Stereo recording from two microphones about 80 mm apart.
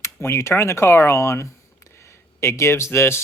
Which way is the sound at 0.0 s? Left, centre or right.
Left.